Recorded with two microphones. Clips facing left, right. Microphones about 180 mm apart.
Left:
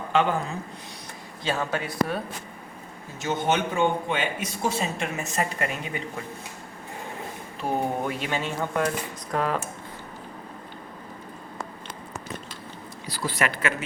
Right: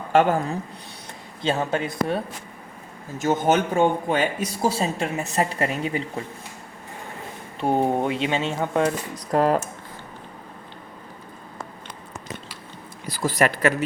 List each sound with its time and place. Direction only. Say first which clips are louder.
0.1 s a woman's voice: right 5 dB; 45° right (ahead or behind)
1.5 s speech: right 4 dB; 25° right (ahead or behind)
3.2 s speech: right 5 dB; 45° right (ahead or behind)
7.6 s speech: right 5 dB; 25° right (ahead or behind)
9.3 s speech: right 7 dB; 40° right (ahead or behind)
13.1 s speech: right 6 dB; 45° right (ahead or behind)